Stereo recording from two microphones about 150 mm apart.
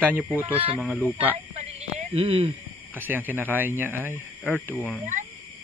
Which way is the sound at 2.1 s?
40° right (ahead or behind).